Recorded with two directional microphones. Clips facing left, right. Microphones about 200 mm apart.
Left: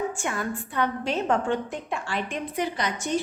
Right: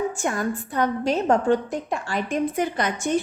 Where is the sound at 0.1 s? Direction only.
40° right (ahead or behind).